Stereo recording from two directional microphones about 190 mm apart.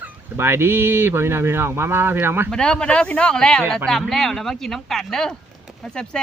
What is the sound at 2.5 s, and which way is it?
Speech, 5° left (ahead or behind).